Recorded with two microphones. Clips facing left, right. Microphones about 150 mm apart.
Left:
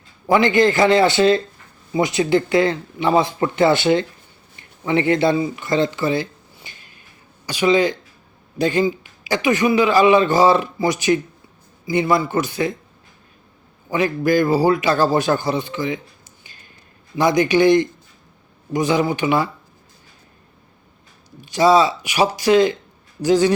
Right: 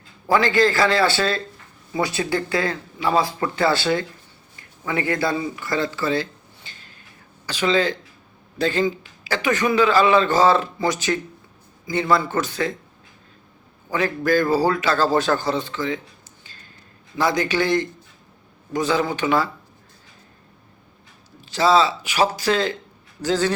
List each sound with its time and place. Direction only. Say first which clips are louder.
0.3 s a man's voice: left 3 dB; 20° left (ahead or behind)
13.9 s a man's voice: left 3 dB; 15° left (ahead or behind)
16.4 s a sound: even; 15° left (ahead or behind)
17.2 s a man's voice: left 5 dB; 15° left (ahead or behind)
21.4 s a man's voice: left 3 dB; 15° left (ahead or behind)